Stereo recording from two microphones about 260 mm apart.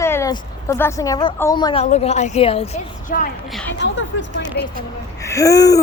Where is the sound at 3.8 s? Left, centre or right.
Left.